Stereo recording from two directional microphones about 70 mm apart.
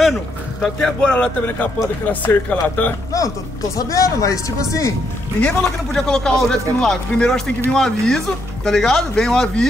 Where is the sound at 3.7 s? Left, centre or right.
Left.